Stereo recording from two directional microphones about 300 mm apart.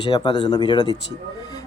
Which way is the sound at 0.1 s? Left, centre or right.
Centre.